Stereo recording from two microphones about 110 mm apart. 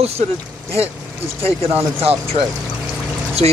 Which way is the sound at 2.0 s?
60° right (ahead or behind).